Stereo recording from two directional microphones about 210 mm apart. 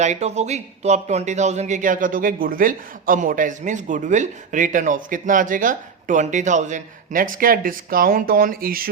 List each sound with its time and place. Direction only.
0.0 s speech: 35° right (ahead or behind)